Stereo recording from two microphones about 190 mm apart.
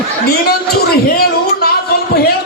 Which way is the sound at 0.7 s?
55° left (ahead or behind).